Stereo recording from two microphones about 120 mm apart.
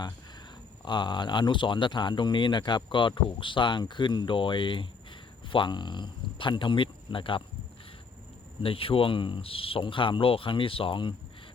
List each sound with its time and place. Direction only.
0.9 s speech: 40° left (ahead or behind)
8.6 s speech: 50° left (ahead or behind)